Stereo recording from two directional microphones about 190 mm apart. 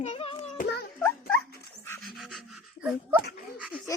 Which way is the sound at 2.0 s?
Centre (ahead or behind).